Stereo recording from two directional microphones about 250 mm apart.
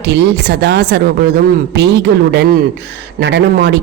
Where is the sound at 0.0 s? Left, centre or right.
Right.